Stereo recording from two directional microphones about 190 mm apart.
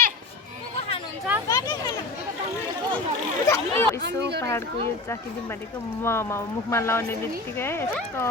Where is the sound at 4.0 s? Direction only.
60° right (ahead or behind).